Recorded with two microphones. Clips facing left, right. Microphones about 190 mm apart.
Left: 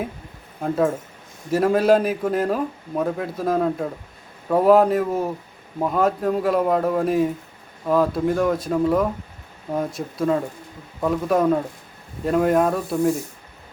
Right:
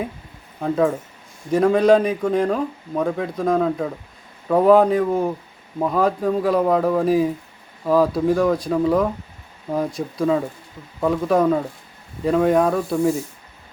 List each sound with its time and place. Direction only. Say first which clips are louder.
0.6 s speech: right 2 dB; centre (ahead or behind)